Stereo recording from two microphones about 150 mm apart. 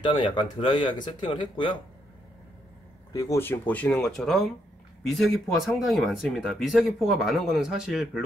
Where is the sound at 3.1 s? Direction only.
25° left (ahead or behind).